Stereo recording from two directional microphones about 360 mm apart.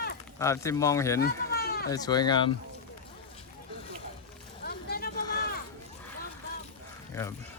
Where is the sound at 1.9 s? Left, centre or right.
Centre.